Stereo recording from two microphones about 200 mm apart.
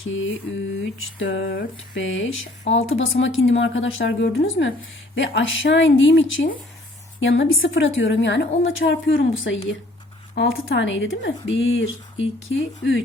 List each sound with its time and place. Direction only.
0.0 s speech: 75° left (ahead or behind)